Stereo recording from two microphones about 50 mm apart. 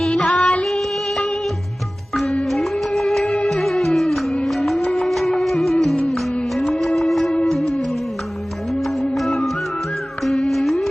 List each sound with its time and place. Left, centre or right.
0.3 s music: left
0.6 s music: centre
2.5 s music: centre
8.8 s music: centre
10.5 s music: centre